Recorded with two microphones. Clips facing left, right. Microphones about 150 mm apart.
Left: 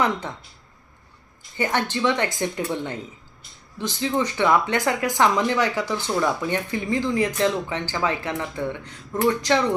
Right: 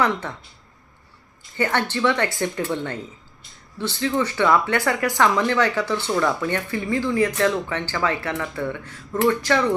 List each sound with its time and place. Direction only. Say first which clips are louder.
0.0 s speech: right 1 dB; 15° left (ahead or behind)
1.5 s speech: right 1 dB; 15° left (ahead or behind)